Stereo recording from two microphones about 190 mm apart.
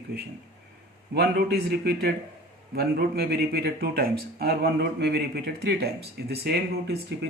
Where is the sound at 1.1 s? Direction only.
60° right (ahead or behind).